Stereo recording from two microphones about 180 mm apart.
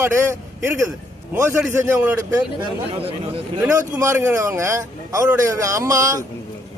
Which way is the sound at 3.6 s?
20° right (ahead or behind).